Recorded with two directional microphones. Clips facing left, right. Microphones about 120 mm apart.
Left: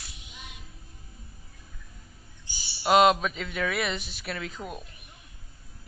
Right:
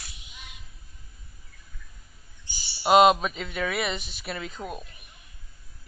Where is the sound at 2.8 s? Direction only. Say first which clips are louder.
Right 2 dB; 15° right (ahead or behind).